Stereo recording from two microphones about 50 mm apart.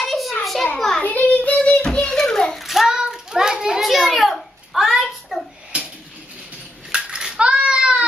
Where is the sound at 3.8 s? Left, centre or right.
Centre.